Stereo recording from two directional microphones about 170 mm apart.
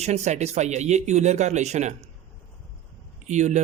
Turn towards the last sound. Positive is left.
turn(degrees=-45)  # may be behind; listen again after turning